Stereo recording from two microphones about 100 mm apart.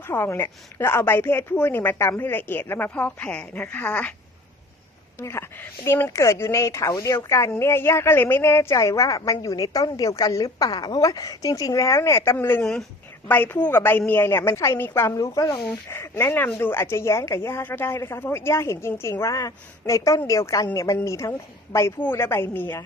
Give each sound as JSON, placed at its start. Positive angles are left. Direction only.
{"t": 0.1, "sound": "a woman's voice", "side_deg": 25}
{"t": 5.2, "sound": "a woman's voice", "side_deg": 25}
{"t": 15.1, "sound": "speech", "side_deg": 35}
{"t": 15.9, "sound": "a woman's voice", "side_deg": 25}